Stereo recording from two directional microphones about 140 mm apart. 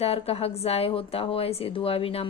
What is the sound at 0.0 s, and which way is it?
Speech, 45° left (ahead or behind).